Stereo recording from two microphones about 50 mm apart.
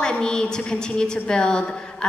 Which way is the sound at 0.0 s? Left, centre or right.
Centre.